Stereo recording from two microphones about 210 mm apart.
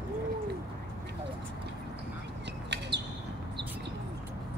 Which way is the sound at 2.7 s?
55° right (ahead or behind).